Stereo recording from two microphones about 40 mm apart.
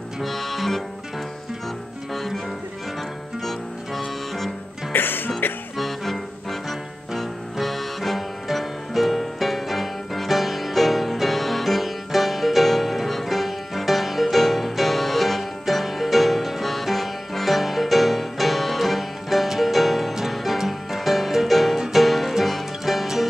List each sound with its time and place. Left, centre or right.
0.2 s music: centre
2.1 s music: centre
4.9 s music: left
5.8 s music: centre